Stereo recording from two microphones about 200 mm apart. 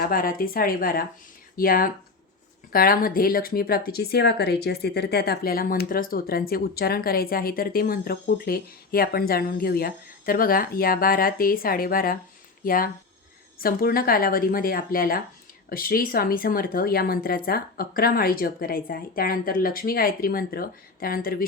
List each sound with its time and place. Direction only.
0.0 s speech: 45° left (ahead or behind)